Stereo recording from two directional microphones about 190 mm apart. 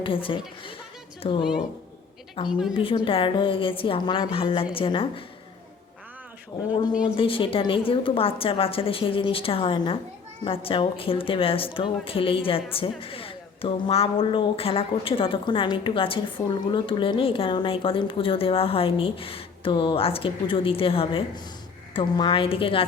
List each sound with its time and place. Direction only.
0.0 s speech: 30° left (ahead or behind)
2.5 s a woman's voice: centre (ahead or behind)
2.7 s speech: 25° left (ahead or behind)
7.2 s speech: 30° left (ahead or behind)